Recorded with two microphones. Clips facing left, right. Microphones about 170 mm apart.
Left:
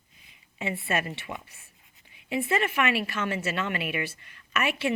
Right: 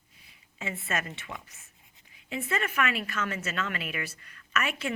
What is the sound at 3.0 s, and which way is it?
Speech, 30° left (ahead or behind).